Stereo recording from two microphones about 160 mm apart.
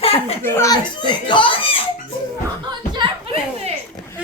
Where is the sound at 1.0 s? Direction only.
30° left (ahead or behind).